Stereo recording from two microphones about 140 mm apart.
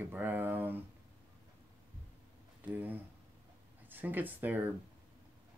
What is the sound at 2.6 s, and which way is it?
Speech, 10° right (ahead or behind).